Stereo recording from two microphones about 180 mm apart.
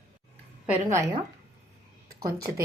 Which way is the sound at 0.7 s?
15° right (ahead or behind).